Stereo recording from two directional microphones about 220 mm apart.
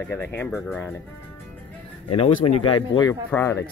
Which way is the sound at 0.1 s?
10° left (ahead or behind).